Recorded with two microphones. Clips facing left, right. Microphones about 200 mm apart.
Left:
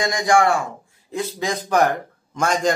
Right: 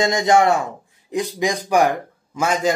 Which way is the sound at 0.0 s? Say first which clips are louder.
Right 2 dB; 25° right (ahead or behind).